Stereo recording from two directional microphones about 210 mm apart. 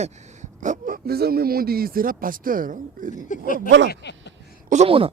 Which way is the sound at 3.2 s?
40° left (ahead or behind).